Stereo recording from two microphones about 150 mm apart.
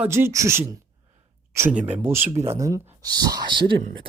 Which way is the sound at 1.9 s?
15° right (ahead or behind).